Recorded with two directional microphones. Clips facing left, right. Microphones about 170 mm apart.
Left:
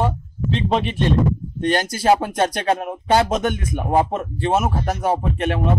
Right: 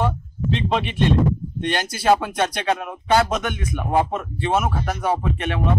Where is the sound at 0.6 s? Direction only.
35° left (ahead or behind).